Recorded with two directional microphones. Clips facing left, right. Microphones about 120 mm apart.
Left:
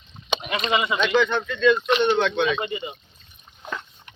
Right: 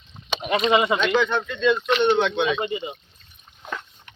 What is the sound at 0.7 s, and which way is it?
Speech, 40° right (ahead or behind).